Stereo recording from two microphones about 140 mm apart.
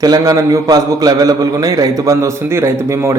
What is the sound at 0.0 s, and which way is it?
A man's voice, 25° right (ahead or behind).